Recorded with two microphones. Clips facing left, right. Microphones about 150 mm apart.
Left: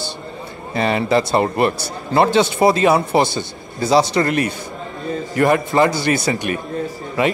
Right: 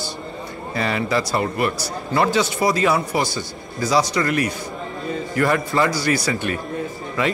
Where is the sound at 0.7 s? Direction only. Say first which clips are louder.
Left 5 dB; 25° left (ahead or behind).